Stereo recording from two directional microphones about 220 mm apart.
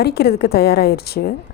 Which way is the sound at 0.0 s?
45° left (ahead or behind).